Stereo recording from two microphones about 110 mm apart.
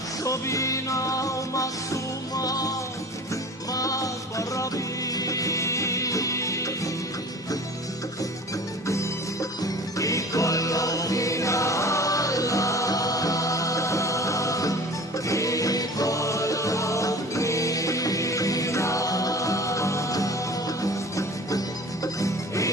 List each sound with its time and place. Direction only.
0.3 s music: 30° left (ahead or behind)
8.9 s music: 30° left (ahead or behind)